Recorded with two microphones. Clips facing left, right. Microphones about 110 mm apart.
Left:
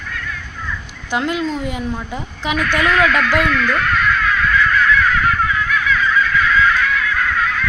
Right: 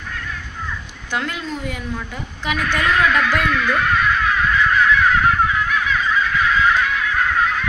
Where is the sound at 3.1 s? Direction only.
20° right (ahead or behind).